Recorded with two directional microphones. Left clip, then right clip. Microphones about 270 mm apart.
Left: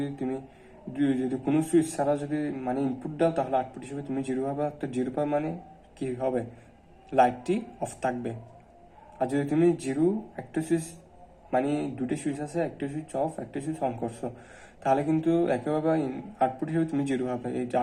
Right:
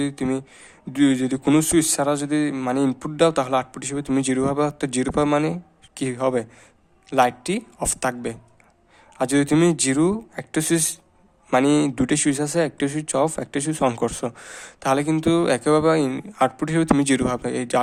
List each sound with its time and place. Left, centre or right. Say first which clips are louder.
0.0 s a man's voice: right 8 dB; right